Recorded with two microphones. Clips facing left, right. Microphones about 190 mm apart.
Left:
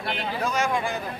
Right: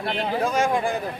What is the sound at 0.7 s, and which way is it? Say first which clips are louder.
Speech: right 3 dB; 50° right (ahead or behind).